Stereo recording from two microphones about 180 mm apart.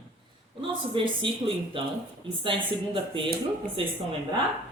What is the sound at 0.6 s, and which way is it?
A man's voice, 30° right (ahead or behind).